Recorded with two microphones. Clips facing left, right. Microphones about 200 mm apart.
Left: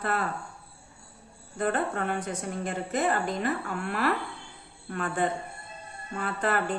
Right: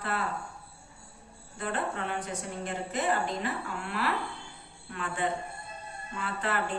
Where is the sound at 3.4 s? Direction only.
50° left (ahead or behind).